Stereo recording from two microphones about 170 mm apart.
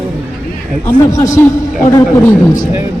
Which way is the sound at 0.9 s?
20° left (ahead or behind).